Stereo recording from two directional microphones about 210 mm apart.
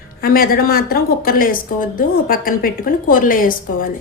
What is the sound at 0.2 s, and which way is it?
Speech, 45° left (ahead or behind).